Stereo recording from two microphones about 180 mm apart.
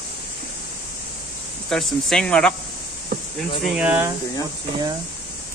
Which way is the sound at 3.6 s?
5° right (ahead or behind).